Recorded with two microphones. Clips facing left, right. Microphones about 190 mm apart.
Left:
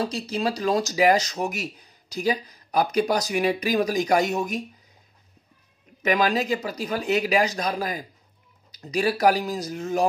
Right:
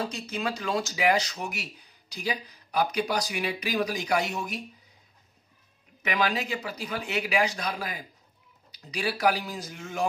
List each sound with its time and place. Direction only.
0.0 s speech: 35° left (ahead or behind)
6.0 s speech: 40° left (ahead or behind)